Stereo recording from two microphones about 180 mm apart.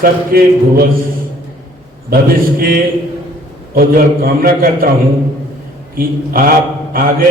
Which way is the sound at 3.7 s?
55° right (ahead or behind).